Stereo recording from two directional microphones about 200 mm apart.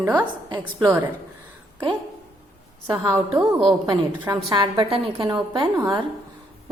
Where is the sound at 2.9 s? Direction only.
20° right (ahead or behind).